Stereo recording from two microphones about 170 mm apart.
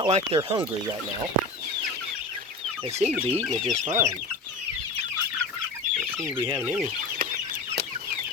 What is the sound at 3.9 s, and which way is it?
Speech, 15° right (ahead or behind).